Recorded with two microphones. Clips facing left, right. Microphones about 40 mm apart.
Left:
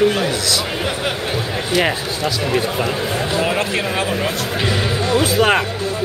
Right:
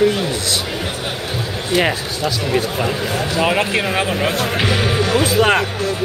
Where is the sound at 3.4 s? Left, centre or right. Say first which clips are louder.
Right 2 dB; right.